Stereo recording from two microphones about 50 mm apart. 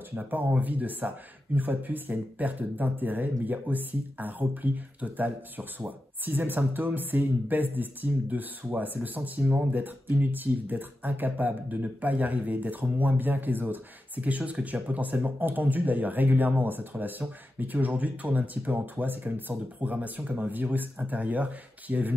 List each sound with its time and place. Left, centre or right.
0.1 s speech: right